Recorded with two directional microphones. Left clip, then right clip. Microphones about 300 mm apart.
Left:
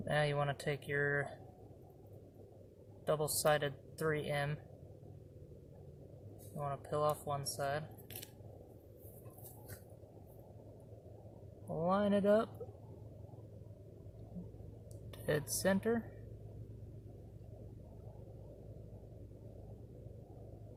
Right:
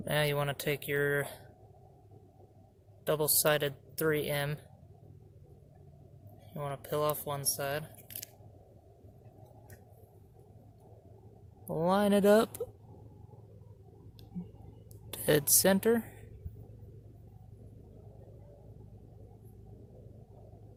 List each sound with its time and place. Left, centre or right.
0.0 s speech: right
3.1 s speech: right
6.6 s speech: right
11.7 s a woman's voice: right
15.1 s a woman's voice: right